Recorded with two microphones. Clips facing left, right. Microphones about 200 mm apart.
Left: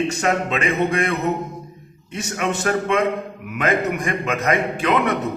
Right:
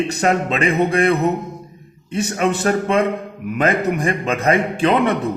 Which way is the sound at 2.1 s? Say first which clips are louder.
Right 5 dB; 35° right (ahead or behind).